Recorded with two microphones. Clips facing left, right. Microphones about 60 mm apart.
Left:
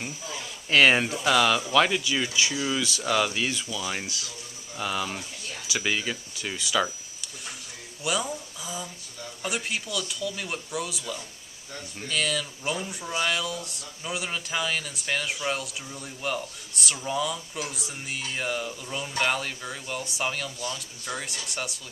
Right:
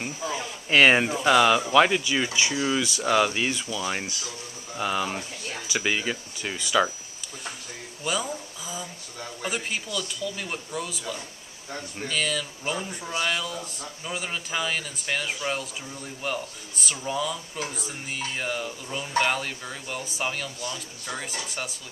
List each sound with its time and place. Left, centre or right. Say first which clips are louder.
0.2 s a sound: right 7 dB; right
0.7 s speech: right 2 dB; centre
8.0 s speech: even; centre